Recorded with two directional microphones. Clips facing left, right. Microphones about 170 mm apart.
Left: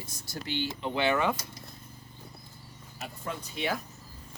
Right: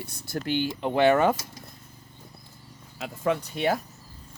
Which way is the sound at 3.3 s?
80° right.